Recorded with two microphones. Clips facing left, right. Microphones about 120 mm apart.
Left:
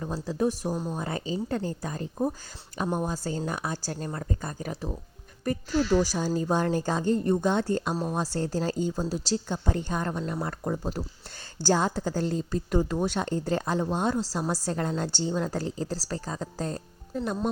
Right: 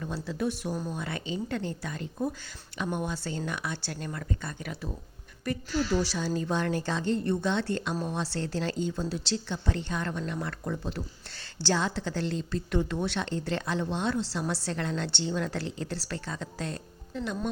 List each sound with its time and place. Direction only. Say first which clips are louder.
0.0 s speech: left 4 dB; 35° left (ahead or behind)